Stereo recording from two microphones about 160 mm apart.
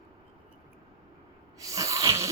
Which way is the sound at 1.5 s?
20° right (ahead or behind).